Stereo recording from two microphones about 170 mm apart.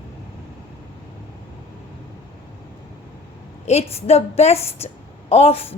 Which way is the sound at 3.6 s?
35° left (ahead or behind).